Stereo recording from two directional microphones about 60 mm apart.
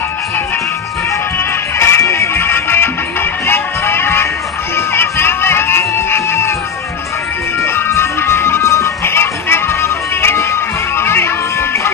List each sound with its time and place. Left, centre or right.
1.8 s music: left
7.6 s music: left